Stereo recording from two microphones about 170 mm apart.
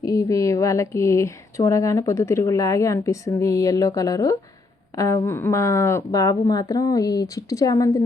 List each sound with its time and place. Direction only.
0.0 s speech: 20° left (ahead or behind)